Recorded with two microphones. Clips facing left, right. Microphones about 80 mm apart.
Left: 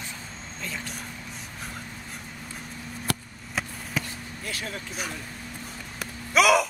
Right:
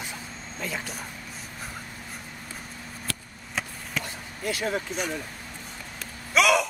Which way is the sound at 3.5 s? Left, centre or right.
Centre.